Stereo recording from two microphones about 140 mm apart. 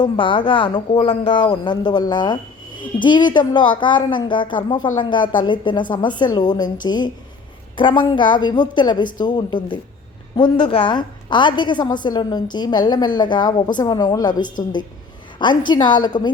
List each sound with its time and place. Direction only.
0.0 s a woman's voice: 35° left (ahead or behind)